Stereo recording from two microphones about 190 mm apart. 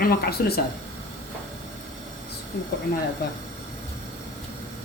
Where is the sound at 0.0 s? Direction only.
55° left (ahead or behind).